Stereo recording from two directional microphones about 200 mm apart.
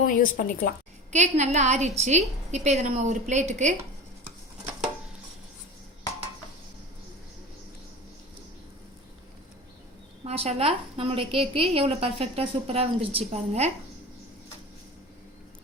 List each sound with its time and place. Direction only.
0.0 s a woman's voice: 45° left (ahead or behind)
1.1 s a woman's voice: 35° right (ahead or behind)
10.2 s a woman's voice: 30° right (ahead or behind)